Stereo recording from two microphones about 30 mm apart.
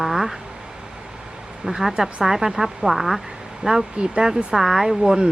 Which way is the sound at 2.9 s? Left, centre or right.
Centre.